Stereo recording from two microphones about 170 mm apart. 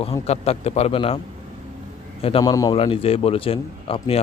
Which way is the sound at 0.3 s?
40° left (ahead or behind).